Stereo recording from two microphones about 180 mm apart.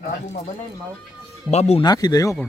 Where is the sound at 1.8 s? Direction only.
20° left (ahead or behind).